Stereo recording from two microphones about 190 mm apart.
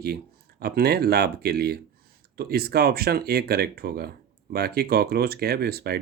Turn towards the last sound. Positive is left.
turn(degrees=-55)  # may be behind; listen again after turning